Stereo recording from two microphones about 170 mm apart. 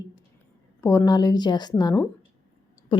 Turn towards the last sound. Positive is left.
turn(degrees=30)  # may be behind; listen again after turning